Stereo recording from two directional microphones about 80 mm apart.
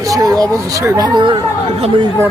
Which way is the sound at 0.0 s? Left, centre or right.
Right.